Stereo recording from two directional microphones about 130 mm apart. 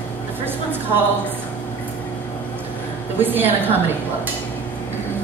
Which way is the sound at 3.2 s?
15° right (ahead or behind).